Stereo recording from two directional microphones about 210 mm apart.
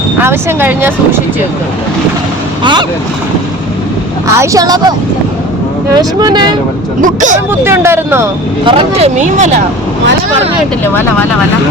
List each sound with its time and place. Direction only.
0.2 s speech: 10° right (ahead or behind)
4.4 s speech: 15° right (ahead or behind)
5.9 s speech: 20° right (ahead or behind)
7.0 s speech: 35° right (ahead or behind)
7.6 s speech: 10° right (ahead or behind)
8.6 s speech: 30° right (ahead or behind)
10.8 s speech: 10° left (ahead or behind)